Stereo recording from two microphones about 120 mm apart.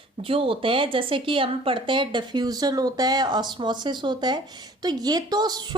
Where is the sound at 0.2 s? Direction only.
50° right (ahead or behind).